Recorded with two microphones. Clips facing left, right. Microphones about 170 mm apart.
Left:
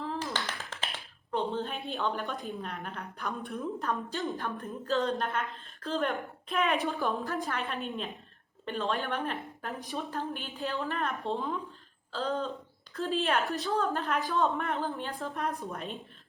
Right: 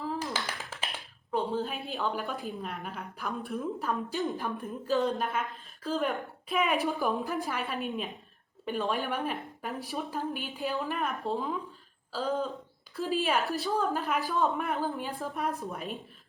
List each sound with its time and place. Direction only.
0.0 s a woman's voice: 5° right (ahead or behind)
7.1 s a woman's voice: 15° right (ahead or behind)
7.4 s a woman's voice: 5° right (ahead or behind)
10.9 s a woman's voice: centre (ahead or behind)